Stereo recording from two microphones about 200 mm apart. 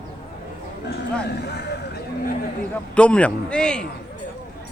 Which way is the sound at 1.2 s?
55° left (ahead or behind).